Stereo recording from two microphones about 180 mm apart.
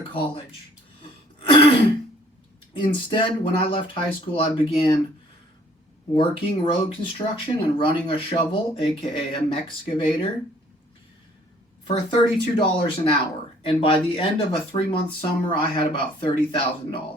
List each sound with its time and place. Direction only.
0.1 s speech: 30° left (ahead or behind)
1.0 s throat clearing: 30° left (ahead or behind)
2.7 s speech: 25° left (ahead or behind)
6.1 s speech: 30° left (ahead or behind)
11.9 s speech: 30° left (ahead or behind)